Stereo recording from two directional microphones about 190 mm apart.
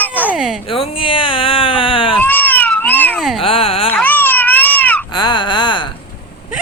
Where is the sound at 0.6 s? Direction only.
30° left (ahead or behind).